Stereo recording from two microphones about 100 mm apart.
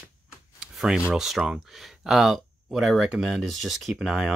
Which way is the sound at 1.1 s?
5° right (ahead or behind).